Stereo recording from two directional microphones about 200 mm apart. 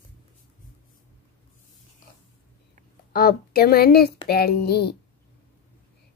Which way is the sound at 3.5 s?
50° left (ahead or behind).